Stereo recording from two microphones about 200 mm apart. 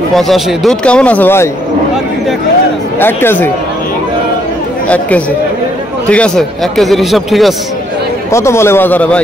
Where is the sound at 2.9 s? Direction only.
10° left (ahead or behind).